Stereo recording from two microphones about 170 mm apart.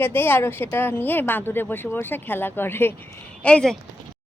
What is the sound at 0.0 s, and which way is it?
Speech, 10° left (ahead or behind).